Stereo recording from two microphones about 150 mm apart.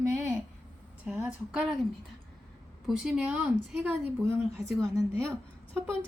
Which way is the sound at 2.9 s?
5° right (ahead or behind).